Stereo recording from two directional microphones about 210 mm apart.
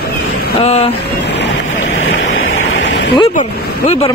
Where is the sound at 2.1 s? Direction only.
65° left (ahead or behind).